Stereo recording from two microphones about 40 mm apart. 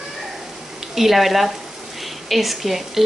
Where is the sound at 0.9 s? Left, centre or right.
Centre.